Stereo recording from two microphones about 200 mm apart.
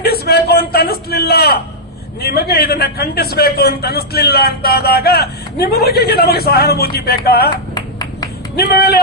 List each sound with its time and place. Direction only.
0.0 s a sound: 50° left (ahead or behind)
2.2 s a man's voice: 50° left (ahead or behind)
7.8 s clapping: 20° left (ahead or behind)
8.5 s a man's voice: 50° left (ahead or behind)